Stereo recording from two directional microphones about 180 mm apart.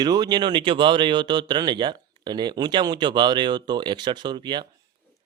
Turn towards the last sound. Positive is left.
turn(degrees=-25)  # may be behind; listen again after turning